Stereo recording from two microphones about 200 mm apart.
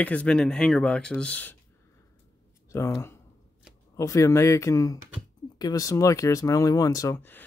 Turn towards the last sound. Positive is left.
turn(degrees=15)  # may be behind; listen again after turning